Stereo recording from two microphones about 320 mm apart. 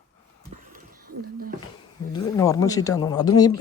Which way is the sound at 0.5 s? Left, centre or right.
Right.